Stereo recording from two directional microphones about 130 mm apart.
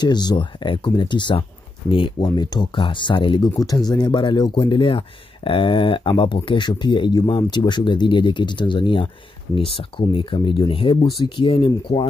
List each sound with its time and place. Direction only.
0.0 s speech: 35° left (ahead or behind)